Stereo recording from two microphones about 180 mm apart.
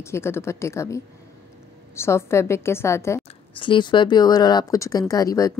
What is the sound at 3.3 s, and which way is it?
Speech, 30° left (ahead or behind).